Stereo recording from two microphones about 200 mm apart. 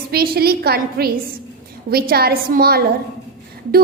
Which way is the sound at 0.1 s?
50° right (ahead or behind).